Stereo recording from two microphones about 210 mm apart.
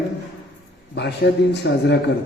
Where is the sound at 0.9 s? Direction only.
55° left (ahead or behind).